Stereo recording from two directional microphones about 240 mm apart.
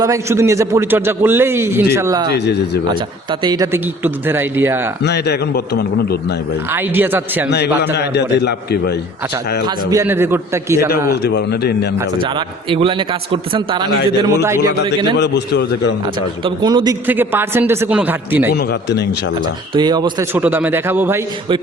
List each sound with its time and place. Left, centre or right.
0.0 s a man's voice: centre
2.3 s a man's voice: left
3.4 s a man's voice: centre
5.0 s a man's voice: left
6.7 s a man's voice: centre
7.9 s a man's voice: left
9.6 s a man's voice: centre
11.1 s a man's voice: left
12.7 s a man's voice: right
15.2 s a man's voice: left
16.4 s a man's voice: centre
18.5 s a man's voice: left
19.7 s a man's voice: centre